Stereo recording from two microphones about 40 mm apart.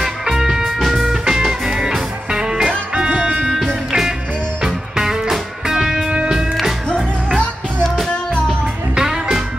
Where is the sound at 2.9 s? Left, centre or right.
Right.